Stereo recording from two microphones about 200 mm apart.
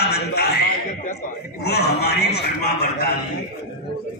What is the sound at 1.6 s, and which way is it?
Speech, 55° left (ahead or behind).